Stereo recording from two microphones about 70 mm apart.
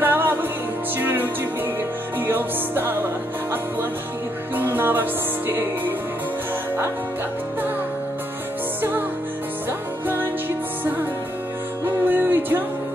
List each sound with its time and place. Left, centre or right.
0.0 s music: right
4.6 s music: right
9.7 s music: right
11.8 s music: right